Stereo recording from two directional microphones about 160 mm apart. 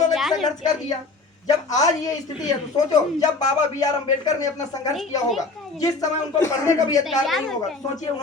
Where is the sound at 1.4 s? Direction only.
20° left (ahead or behind).